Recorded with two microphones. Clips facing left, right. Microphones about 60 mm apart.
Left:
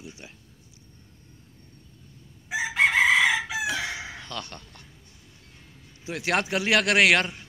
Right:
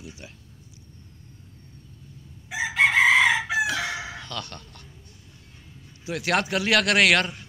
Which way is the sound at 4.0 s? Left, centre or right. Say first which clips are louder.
Right 3 dB; right.